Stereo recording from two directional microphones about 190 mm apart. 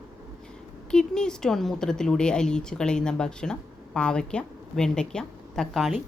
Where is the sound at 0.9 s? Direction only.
5° left (ahead or behind).